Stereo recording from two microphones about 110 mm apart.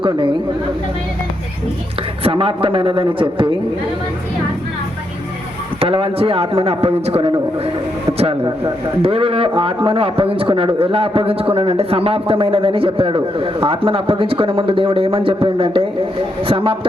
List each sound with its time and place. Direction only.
0.0 s a woman's voice: 50° right (ahead or behind)
2.2 s a man's voice: 55° right (ahead or behind)
5.8 s a man's voice: 60° right (ahead or behind)
9.0 s a man's voice: 60° right (ahead or behind)